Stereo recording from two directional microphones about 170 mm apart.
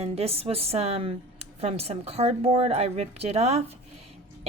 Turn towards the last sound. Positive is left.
turn(degrees=-35)  # may be behind; listen again after turning